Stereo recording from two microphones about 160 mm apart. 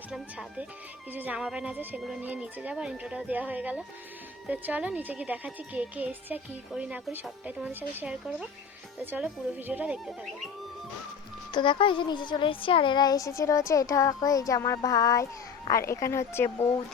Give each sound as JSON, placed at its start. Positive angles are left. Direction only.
{"t": 0.1, "sound": "a woman's voice", "side_deg": -5}
{"t": 11.5, "sound": "speech", "side_deg": 30}